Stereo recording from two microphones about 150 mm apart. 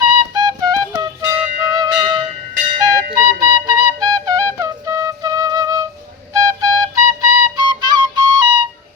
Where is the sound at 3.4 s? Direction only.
25° right (ahead or behind).